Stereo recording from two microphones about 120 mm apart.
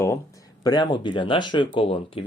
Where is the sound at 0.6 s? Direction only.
40° left (ahead or behind).